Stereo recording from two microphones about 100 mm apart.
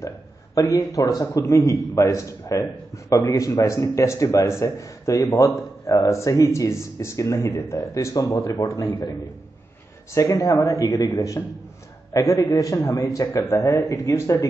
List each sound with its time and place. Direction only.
0.6 s speech: 35° left (ahead or behind)
10.1 s a man's voice: 35° left (ahead or behind)